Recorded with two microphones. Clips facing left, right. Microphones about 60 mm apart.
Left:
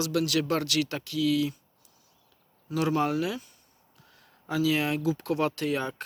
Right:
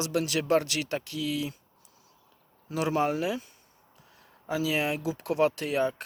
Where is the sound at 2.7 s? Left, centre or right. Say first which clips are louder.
Left 1 dB; right.